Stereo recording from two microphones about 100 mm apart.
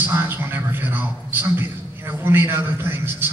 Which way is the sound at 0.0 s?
20° right (ahead or behind).